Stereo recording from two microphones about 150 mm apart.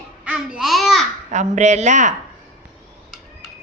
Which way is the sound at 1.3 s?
50° right (ahead or behind).